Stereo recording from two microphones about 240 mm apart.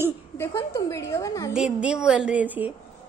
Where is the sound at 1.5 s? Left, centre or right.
Centre.